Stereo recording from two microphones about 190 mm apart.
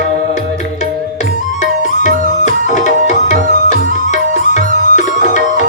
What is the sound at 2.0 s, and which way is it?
Music, 40° left (ahead or behind).